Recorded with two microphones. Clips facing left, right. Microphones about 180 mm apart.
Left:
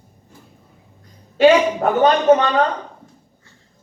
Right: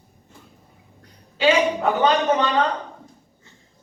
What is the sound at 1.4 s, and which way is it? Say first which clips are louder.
Speech: left 6 dB; 50° left (ahead or behind).